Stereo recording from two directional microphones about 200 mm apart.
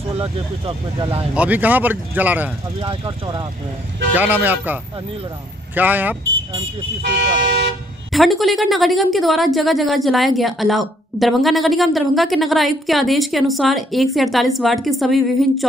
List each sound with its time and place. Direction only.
0.1 s speech: 30° right (ahead or behind)
1.3 s speech: 5° right (ahead or behind)
2.8 s speech: 25° right (ahead or behind)
4.1 s speech: 10° right (ahead or behind)
5.8 s speech: 10° right (ahead or behind)
7.4 s toot: 60° right (ahead or behind)
8.1 s a woman's voice: centre (ahead or behind)